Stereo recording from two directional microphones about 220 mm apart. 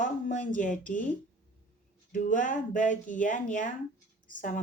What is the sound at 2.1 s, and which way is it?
Speech, 35° left (ahead or behind).